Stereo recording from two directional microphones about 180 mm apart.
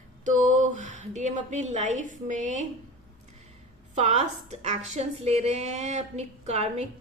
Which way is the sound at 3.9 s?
40° right (ahead or behind).